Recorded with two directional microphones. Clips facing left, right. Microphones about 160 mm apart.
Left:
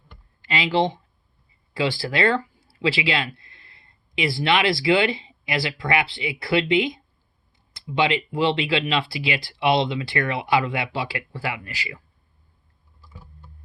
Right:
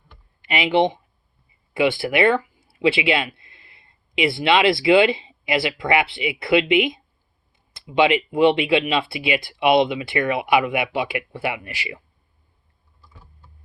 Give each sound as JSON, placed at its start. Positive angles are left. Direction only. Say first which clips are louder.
{"t": 0.4, "sound": "speech", "louder": "right 3 dB", "side_deg": -25}